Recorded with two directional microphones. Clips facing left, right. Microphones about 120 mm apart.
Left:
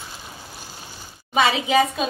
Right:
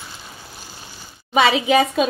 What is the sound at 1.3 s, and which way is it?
Speech, 70° right (ahead or behind).